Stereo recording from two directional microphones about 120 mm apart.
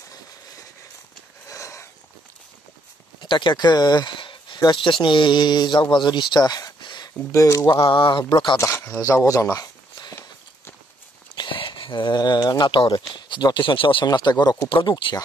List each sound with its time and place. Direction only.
1.5 s a sound: 25° left (ahead or behind)
3.2 s speech: 40° left (ahead or behind)
7.4 s speech: 25° left (ahead or behind)
7.8 s speech: 45° left (ahead or behind)
8.5 s speech: 20° left (ahead or behind)
11.3 s speech: 45° left (ahead or behind)